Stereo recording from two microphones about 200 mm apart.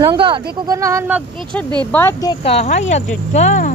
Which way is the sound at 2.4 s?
30° left (ahead or behind).